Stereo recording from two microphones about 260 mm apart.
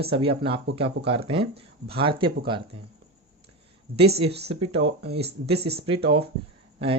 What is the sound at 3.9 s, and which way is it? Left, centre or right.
Speech, right.